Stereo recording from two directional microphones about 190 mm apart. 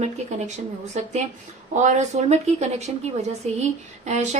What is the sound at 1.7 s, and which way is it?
A woman's voice, 40° right (ahead or behind).